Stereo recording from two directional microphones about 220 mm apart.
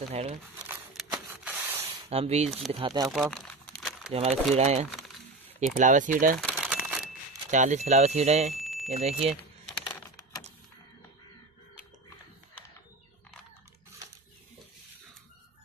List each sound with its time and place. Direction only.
0.1 s speech: 30° right (ahead or behind)
0.7 s a sound: 5° right (ahead or behind)
2.0 s speech: 30° right (ahead or behind)
3.1 s crumpling: centre (ahead or behind)
4.1 s speech: 30° right (ahead or behind)
6.6 s crumpling: 5° right (ahead or behind)
7.5 s speech: 35° right (ahead or behind)
8.5 s a sound: centre (ahead or behind)
8.9 s speech: 30° right (ahead or behind)
9.3 s a sound: centre (ahead or behind)